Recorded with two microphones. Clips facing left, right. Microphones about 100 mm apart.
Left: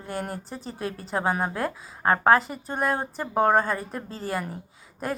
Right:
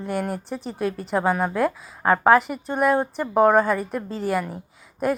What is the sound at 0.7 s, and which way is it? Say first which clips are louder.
Speech: right 7 dB; 80° right.